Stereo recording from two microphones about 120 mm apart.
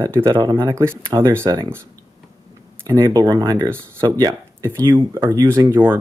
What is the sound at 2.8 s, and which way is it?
Speech, 25° right (ahead or behind).